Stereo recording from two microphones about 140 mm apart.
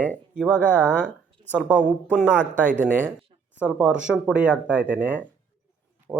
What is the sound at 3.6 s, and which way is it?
Speech, 5° right (ahead or behind).